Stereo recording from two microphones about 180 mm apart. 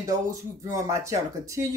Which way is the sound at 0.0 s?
20° right (ahead or behind).